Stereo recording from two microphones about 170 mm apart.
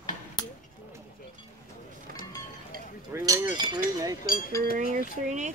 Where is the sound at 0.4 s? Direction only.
25° left (ahead or behind).